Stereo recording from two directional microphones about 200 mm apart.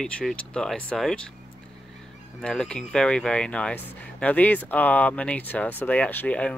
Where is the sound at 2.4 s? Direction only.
5° left (ahead or behind).